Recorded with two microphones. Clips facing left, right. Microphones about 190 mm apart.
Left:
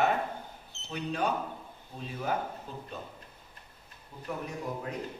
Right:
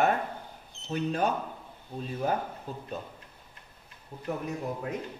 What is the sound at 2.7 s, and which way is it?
Speech, 45° right (ahead or behind).